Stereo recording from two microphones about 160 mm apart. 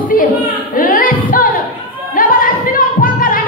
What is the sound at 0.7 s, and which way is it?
Music, 60° left (ahead or behind).